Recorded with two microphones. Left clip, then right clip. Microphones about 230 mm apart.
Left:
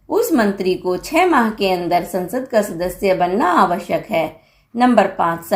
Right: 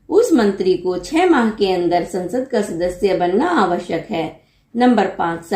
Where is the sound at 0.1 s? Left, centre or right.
Left.